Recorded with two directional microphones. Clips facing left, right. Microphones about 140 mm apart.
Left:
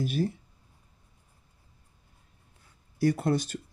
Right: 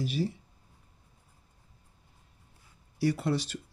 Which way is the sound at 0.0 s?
50° left (ahead or behind).